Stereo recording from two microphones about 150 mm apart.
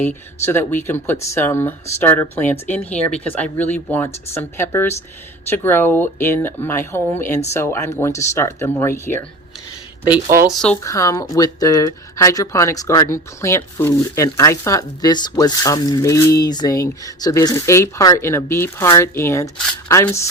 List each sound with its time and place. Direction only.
0.0 s speech: 15° left (ahead or behind)
10.5 s speech: 5° left (ahead or behind)
10.8 s speech: 20° left (ahead or behind)